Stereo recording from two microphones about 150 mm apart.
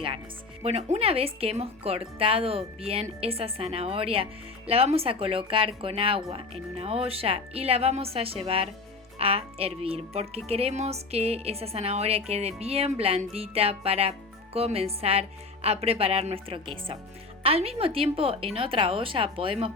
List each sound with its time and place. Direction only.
0.6 s speech: 45° right (ahead or behind)